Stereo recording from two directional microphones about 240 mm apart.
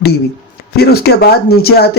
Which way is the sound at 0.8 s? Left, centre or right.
Left.